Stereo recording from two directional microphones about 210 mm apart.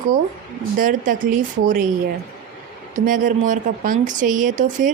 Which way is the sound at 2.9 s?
40° right (ahead or behind).